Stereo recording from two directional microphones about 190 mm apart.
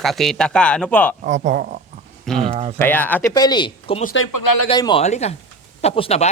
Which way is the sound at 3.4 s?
20° left (ahead or behind).